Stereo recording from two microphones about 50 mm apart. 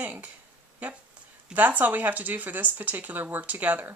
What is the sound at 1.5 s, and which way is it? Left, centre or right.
Speech, right.